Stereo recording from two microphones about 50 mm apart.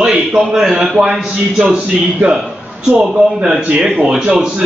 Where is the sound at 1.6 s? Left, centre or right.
Right.